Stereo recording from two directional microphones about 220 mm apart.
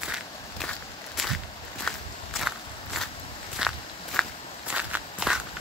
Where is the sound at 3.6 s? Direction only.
5° right (ahead or behind).